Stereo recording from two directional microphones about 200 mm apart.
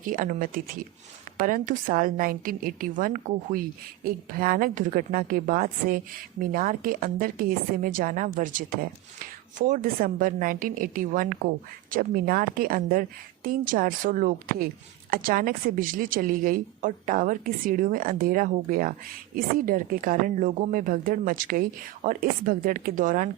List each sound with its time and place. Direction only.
0.0 s a woman's voice: 45° right (ahead or behind)